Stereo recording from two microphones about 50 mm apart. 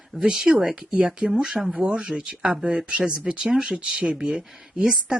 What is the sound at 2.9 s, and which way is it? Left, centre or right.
Speech, centre.